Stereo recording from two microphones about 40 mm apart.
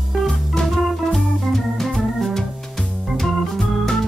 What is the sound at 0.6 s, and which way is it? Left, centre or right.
Organ, centre.